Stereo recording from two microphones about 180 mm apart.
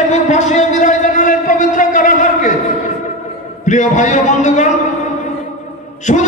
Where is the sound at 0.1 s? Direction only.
40° left (ahead or behind).